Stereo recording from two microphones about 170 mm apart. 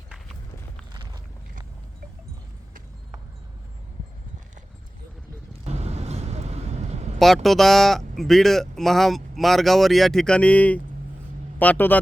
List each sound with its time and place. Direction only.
5.6 s vehicle: 40° right (ahead or behind)
7.4 s a man's voice: centre (ahead or behind)